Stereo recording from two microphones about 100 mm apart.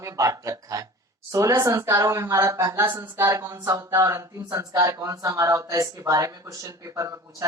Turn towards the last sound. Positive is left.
turn(degrees=-35)  # may be behind; listen again after turning